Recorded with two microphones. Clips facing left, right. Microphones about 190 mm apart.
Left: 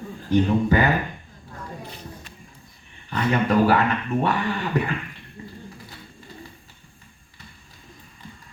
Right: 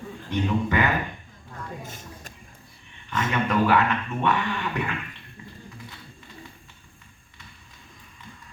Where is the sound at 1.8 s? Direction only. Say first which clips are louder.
Left 2 dB; 45° right (ahead or behind).